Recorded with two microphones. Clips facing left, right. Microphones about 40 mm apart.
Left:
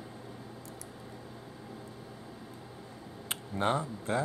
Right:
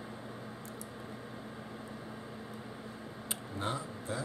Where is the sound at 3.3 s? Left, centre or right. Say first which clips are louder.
Left 7 dB; left.